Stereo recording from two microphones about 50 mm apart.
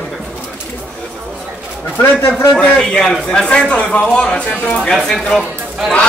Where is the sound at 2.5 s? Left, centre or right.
Centre.